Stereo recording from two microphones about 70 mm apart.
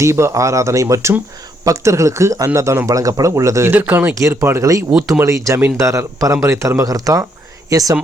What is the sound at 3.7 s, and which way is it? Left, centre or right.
Speech, right.